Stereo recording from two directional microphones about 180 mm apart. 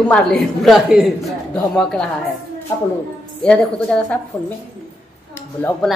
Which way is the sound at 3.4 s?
5° left (ahead or behind).